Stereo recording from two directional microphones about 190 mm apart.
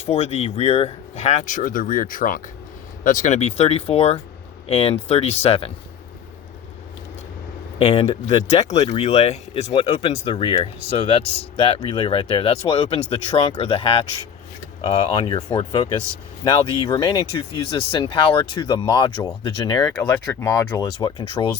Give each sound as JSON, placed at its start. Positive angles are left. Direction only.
{"t": 0.0, "sound": "speech", "side_deg": 35}
{"t": 7.8, "sound": "speech", "side_deg": 30}